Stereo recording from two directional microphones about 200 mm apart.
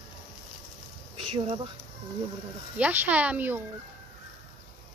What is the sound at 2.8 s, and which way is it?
Speech, 10° right (ahead or behind).